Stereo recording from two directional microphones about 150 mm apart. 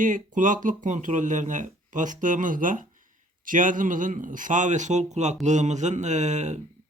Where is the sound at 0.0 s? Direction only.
60° right (ahead or behind).